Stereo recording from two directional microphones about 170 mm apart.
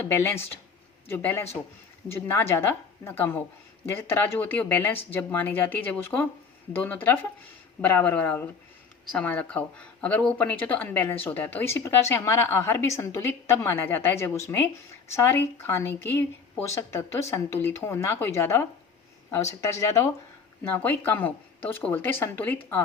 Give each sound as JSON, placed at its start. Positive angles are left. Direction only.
{"t": 0.1, "sound": "speech", "side_deg": 15}